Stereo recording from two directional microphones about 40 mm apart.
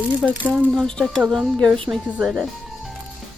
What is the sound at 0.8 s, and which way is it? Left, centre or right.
Speech, centre.